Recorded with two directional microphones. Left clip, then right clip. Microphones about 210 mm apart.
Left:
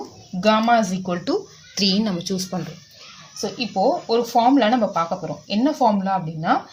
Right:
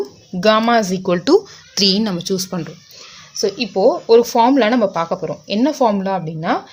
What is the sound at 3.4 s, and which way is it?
Speech, 50° right (ahead or behind).